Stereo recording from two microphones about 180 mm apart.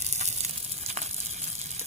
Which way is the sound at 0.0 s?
40° right (ahead or behind).